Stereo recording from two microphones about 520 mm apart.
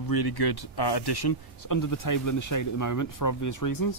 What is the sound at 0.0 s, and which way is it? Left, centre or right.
Speech, left.